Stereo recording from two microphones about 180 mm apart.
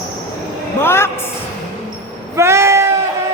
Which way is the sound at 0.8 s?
15° left (ahead or behind).